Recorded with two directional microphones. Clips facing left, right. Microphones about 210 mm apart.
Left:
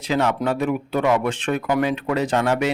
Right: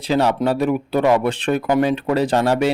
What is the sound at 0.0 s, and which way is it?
A man's voice, 35° right (ahead or behind).